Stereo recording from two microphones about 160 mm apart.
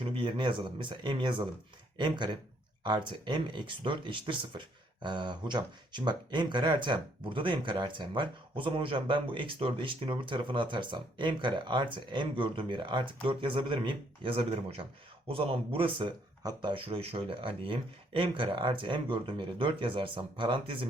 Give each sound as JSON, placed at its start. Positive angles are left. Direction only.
{"t": 0.0, "sound": "speech", "side_deg": -30}